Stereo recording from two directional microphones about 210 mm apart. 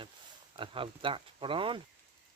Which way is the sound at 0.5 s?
25° right (ahead or behind).